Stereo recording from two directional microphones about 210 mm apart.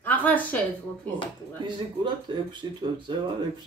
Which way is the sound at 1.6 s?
20° right (ahead or behind).